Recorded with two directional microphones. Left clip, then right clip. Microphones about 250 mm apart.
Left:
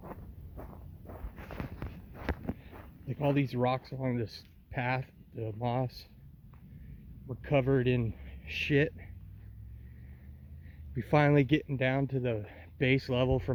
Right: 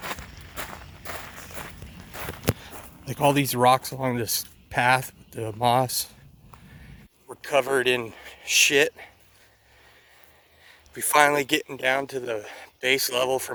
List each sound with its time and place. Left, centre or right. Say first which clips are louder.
0.0 s walk: right 14 dB; centre
2.1 s a sound: right 10 dB; centre
4.0 s speech: right 9 dB; centre
7.3 s speech: right 6 dB; centre
10.7 s speech: right 6 dB; centre